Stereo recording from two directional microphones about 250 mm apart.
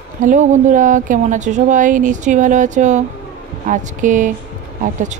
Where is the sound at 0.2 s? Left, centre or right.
Right.